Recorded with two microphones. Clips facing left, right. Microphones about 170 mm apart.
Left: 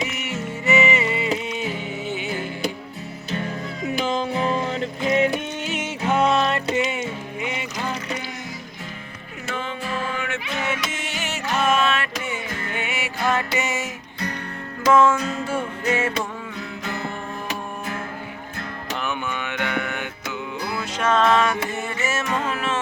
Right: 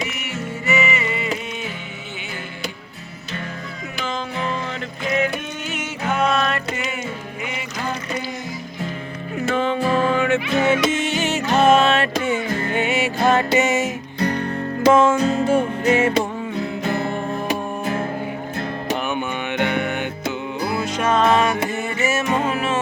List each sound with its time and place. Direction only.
0.0 s music: 20° left (ahead or behind)
3.9 s music: 35° left (ahead or behind)
9.6 s music: 35° right (ahead or behind)
14.2 s music: 30° right (ahead or behind)
14.8 s music: 20° right (ahead or behind)
15.1 s music: 35° right (ahead or behind)
15.4 s music: 20° right (ahead or behind)
16.6 s music: 30° right (ahead or behind)
21.0 s music: 15° right (ahead or behind)